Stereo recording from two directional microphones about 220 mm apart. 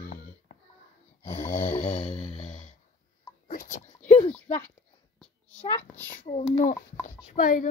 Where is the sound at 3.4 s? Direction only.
35° left (ahead or behind).